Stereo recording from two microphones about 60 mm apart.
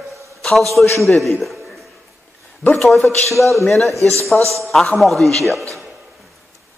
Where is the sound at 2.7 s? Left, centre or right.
Centre.